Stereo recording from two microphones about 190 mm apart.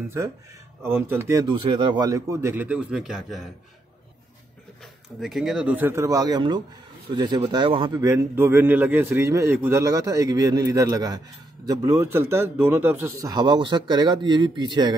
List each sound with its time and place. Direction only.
0.8 s a man's voice: 10° right (ahead or behind)
5.2 s a man's voice: centre (ahead or behind)
13.3 s speech: 25° right (ahead or behind)